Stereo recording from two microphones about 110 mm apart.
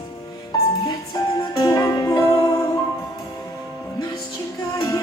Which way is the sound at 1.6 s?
35° left (ahead or behind).